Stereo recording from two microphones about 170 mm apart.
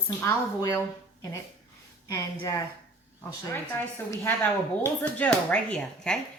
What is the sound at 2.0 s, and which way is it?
A woman's voice, 20° left (ahead or behind).